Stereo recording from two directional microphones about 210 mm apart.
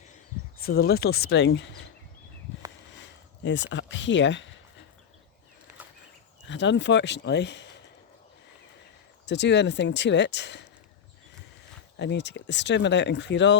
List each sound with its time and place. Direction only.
0.8 s speech: 50° left (ahead or behind)
2.9 s a sound: 60° left (ahead or behind)
6.5 s speech: 60° left (ahead or behind)
9.2 s speech: 55° left (ahead or behind)
11.9 s speech: 55° left (ahead or behind)